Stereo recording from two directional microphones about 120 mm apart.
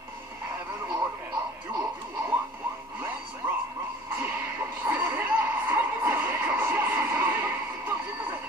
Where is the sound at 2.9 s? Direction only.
15° right (ahead or behind).